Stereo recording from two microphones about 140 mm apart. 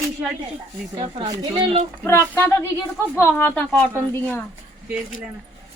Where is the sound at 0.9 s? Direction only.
40° right (ahead or behind).